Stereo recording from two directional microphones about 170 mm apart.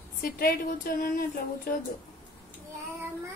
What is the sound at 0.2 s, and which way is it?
A woman's voice, 60° left (ahead or behind).